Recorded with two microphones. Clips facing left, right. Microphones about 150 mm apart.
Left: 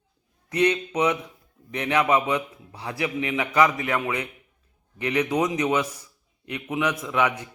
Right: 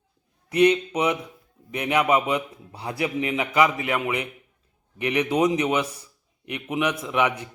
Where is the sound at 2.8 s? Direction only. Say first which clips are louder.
Right 1 dB; 30° right (ahead or behind).